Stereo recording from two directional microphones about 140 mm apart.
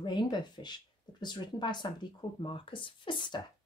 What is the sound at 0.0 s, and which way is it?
Speech, 30° left (ahead or behind).